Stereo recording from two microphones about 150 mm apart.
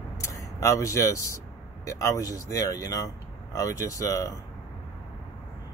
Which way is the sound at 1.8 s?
20° left (ahead or behind).